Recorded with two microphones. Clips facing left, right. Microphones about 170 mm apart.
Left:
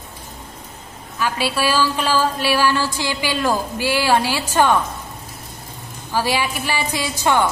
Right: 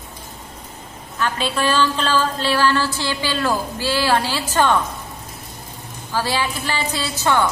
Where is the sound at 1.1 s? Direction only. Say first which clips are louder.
Left 1 dB; 10° left (ahead or behind).